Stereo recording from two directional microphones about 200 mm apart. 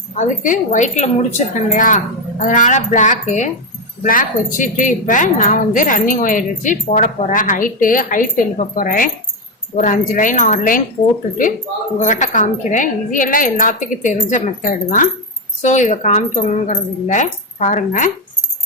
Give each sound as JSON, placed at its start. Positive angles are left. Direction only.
{"t": 0.2, "sound": "speech", "side_deg": 40}
{"t": 11.9, "sound": "speech", "side_deg": 40}